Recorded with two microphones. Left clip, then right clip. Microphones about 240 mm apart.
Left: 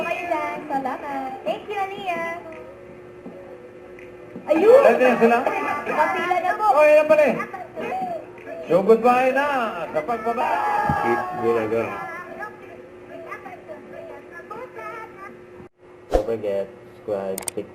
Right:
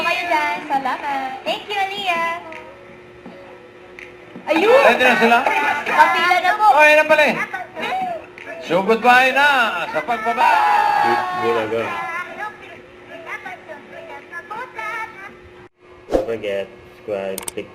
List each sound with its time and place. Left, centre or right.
0.0 s a woman's voice: centre
2.0 s child singing: centre
4.4 s a man's voice: centre
16.0 s a sound: centre
17.1 s speech: centre